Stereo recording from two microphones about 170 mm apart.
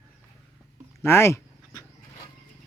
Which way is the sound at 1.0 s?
15° left (ahead or behind).